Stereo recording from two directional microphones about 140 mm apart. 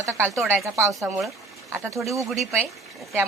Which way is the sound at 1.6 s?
20° right (ahead or behind).